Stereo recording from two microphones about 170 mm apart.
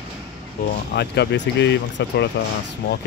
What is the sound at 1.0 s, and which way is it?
Speech, 85° left.